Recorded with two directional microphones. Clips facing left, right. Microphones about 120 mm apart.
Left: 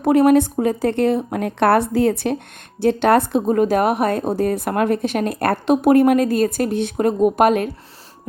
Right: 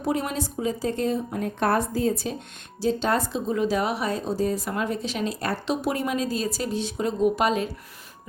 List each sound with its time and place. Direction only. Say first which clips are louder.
0.0 s speech: left 13 dB; 60° left (ahead or behind)